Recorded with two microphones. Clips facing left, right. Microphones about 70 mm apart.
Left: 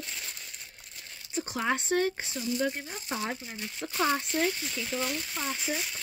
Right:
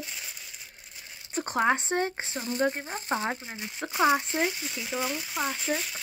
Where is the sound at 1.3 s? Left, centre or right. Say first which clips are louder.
Right 5 dB; right.